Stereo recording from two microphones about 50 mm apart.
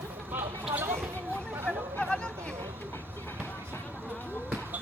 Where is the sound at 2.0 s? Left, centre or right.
Centre.